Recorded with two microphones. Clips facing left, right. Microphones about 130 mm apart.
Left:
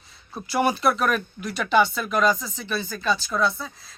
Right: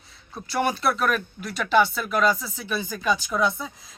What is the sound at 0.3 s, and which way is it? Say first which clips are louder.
Speech: left 2 dB; 5° left (ahead or behind).